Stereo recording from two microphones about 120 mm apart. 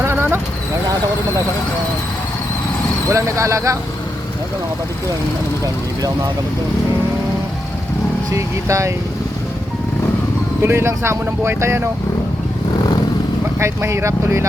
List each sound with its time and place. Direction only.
0.0 s a sound: 20° right (ahead or behind)
3.1 s speech: 25° right (ahead or behind)
5.6 s speech: 30° right (ahead or behind)
8.3 s speech: 25° right (ahead or behind)
10.6 s speech: 20° right (ahead or behind)
13.6 s speech: 25° right (ahead or behind)